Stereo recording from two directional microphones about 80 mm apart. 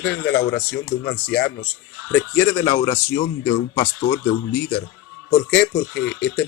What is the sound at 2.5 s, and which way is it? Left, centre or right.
Speech, left.